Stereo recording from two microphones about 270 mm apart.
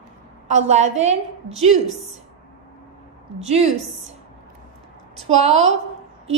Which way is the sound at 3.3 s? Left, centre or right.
Right.